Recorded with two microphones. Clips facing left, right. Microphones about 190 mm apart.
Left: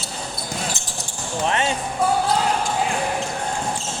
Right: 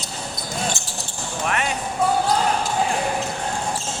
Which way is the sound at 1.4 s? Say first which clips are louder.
Left 2 dB; 25° left (ahead or behind).